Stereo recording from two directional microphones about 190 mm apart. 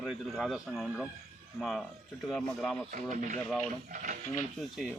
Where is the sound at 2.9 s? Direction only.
40° right (ahead or behind).